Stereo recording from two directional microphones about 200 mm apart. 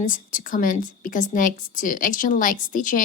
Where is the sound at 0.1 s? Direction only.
40° left (ahead or behind).